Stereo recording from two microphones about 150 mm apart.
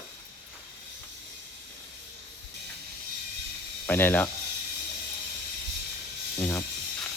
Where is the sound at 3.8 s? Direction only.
10° left (ahead or behind).